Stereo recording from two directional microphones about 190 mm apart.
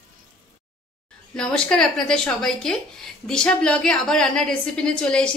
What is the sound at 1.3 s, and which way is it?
A woman's voice, 5° left (ahead or behind).